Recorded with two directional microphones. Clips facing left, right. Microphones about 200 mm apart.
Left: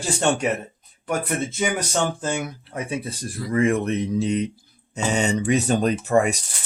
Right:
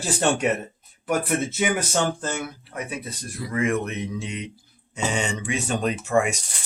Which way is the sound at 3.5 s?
35° left (ahead or behind).